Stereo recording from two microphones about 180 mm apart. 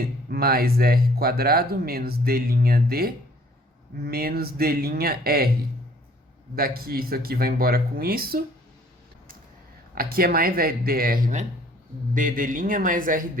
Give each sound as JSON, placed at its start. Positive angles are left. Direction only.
{"t": 0.0, "sound": "speech", "side_deg": -55}
{"t": 6.6, "sound": "speech", "side_deg": -55}
{"t": 9.9, "sound": "speech", "side_deg": -55}